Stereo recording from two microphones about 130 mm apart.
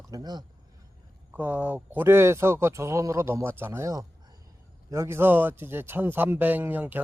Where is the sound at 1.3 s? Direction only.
15° right (ahead or behind).